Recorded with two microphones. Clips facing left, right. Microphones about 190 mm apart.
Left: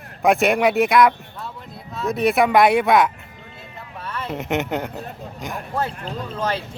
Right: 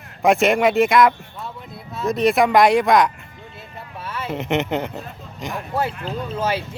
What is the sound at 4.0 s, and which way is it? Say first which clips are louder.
Speech: right 1 dB; 5° right (ahead or behind).